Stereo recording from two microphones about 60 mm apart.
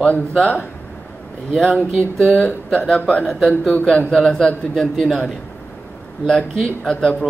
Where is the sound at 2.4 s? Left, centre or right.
Centre.